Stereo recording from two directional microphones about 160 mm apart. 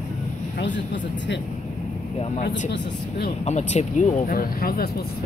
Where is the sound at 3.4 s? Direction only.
45° left (ahead or behind).